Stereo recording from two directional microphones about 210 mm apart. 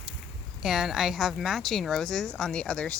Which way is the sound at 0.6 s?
Centre (ahead or behind).